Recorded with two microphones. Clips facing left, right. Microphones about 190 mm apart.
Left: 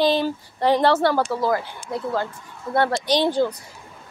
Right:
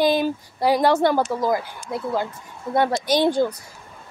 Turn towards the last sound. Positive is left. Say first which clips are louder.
# right 1 dB
turn(degrees=-15)  # may be behind; listen again after turning